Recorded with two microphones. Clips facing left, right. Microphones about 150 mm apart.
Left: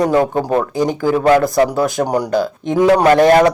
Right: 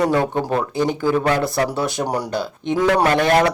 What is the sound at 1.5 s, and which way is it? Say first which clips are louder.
Speech: left 7 dB; 20° left (ahead or behind).